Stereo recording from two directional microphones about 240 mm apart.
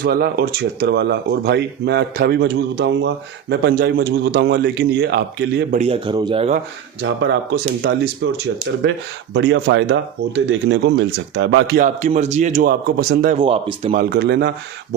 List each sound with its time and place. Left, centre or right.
0.0 s speech: right
5.7 s a man's voice: right
7.0 s speech: right
11.9 s a man's voice: right
13.4 s a man's voice: right
14.0 s speech: right